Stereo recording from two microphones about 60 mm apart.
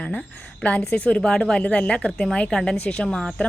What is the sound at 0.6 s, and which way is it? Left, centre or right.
Speech, left.